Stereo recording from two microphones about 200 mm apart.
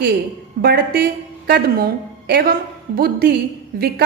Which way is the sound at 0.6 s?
50° right (ahead or behind).